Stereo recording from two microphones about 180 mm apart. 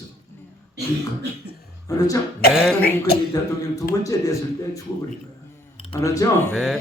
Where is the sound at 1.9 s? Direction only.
20° left (ahead or behind).